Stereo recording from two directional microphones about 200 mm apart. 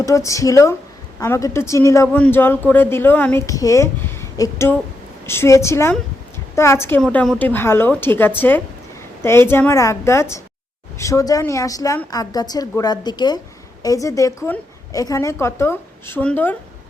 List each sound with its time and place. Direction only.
0.0 s speech: 15° left (ahead or behind)